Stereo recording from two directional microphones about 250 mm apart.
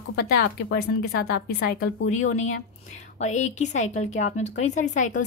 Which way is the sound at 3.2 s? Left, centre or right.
Left.